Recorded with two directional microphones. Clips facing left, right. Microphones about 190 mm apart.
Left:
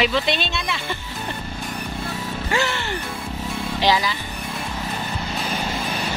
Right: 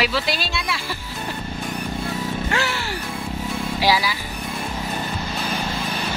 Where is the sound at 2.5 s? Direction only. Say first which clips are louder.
Left 1 dB; centre (ahead or behind).